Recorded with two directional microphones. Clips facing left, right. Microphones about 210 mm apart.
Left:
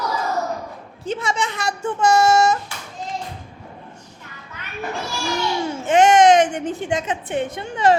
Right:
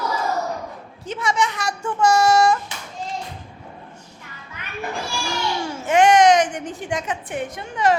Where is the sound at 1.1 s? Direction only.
25° left (ahead or behind).